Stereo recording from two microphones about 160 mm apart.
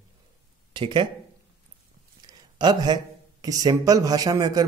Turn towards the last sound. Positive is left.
turn(degrees=-25)  # may be behind; listen again after turning